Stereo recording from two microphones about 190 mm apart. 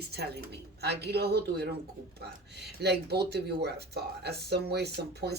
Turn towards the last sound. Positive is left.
turn(degrees=-60)  # may be behind; listen again after turning